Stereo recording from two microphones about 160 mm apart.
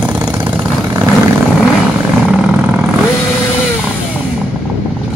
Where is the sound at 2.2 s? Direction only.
5° right (ahead or behind).